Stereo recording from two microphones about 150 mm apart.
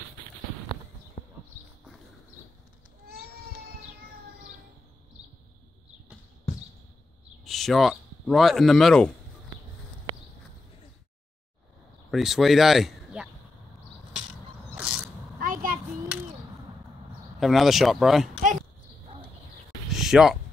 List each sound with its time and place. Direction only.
7.4 s speech: centre (ahead or behind)
12.1 s speech: centre (ahead or behind)
14.8 s mechanisms: 5° right (ahead or behind)
15.3 s a sound: 70° right (ahead or behind)
17.4 s speech: centre (ahead or behind)
19.9 s a sound: centre (ahead or behind)